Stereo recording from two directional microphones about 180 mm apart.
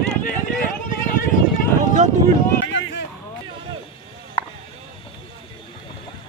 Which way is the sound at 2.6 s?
90° left.